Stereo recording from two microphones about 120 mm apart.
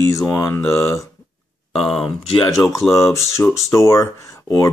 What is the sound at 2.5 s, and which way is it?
Speech, 25° left (ahead or behind).